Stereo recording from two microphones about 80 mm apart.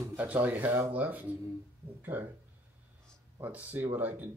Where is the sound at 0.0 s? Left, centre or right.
Right.